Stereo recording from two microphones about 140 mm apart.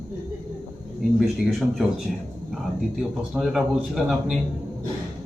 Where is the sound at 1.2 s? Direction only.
Centre (ahead or behind).